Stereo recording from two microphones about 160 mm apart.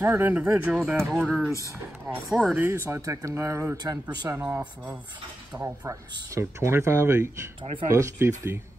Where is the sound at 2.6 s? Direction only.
15° right (ahead or behind).